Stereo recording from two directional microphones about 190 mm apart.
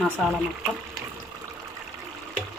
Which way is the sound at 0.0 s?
Centre (ahead or behind).